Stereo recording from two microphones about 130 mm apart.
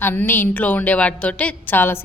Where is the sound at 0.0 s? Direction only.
15° left (ahead or behind).